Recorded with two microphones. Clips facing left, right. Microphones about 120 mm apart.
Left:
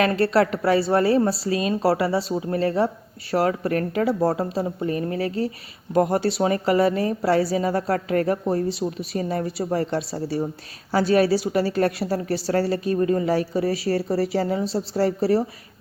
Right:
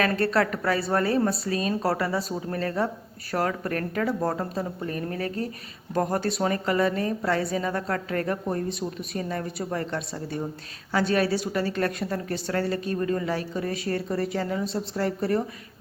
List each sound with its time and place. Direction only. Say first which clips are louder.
0.0 s a woman's voice: left 4 dB; 25° left (ahead or behind)
1.5 s speech: left 4 dB; 40° right (ahead or behind)
1.8 s a woman's voice: left 5 dB; 30° left (ahead or behind)